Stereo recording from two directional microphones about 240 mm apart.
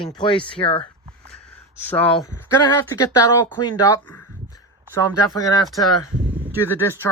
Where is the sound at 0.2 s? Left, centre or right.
Left.